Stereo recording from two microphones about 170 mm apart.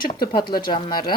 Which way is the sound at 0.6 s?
25° left (ahead or behind).